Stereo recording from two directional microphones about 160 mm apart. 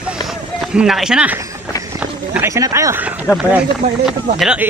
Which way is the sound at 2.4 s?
20° right (ahead or behind).